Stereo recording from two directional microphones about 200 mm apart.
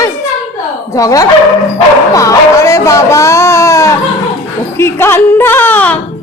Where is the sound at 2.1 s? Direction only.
15° left (ahead or behind).